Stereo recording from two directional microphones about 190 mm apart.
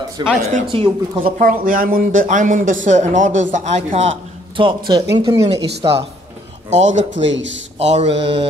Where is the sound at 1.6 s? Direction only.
45° right (ahead or behind).